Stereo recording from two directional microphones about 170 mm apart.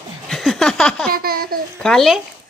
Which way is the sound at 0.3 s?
Centre (ahead or behind).